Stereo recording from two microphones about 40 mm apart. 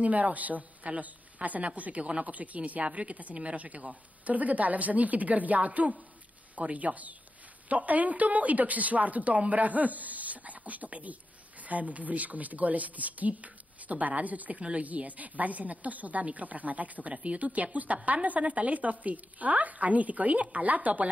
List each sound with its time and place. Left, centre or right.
0.0 s a woman's voice: right